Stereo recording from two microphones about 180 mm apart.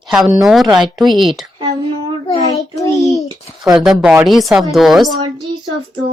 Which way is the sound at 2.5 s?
20° left (ahead or behind).